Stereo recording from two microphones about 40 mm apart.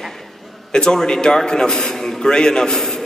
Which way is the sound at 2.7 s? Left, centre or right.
Centre.